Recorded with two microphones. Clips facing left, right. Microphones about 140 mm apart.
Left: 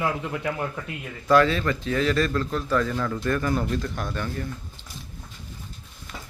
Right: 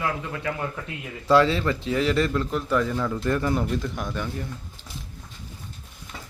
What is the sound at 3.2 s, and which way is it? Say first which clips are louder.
Speech: even; 20° right (ahead or behind).